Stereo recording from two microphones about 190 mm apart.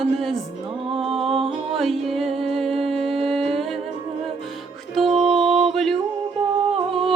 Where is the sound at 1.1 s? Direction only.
30° right (ahead or behind).